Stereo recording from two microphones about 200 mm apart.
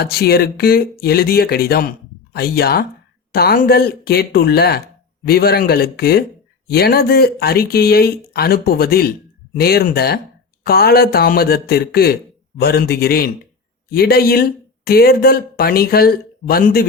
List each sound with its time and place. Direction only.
0.0 s speech: 50° left (ahead or behind)